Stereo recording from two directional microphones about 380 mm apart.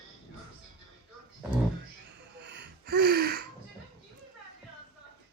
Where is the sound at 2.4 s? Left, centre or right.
Right.